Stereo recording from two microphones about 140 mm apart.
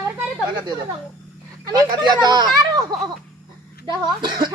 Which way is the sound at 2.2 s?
30° right (ahead or behind).